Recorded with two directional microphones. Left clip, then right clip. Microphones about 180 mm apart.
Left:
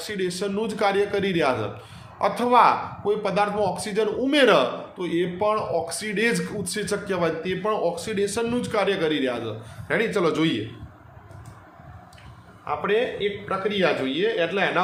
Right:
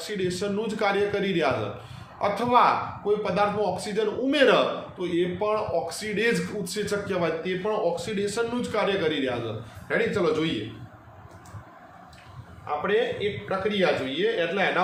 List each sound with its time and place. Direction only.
0.0 s a man's voice: 45° left (ahead or behind)
12.6 s speech: 45° left (ahead or behind)